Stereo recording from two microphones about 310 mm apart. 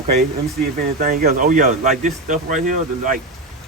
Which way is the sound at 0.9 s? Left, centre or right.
Right.